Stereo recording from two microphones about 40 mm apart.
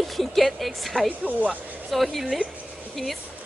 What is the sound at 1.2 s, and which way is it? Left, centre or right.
Speech, right.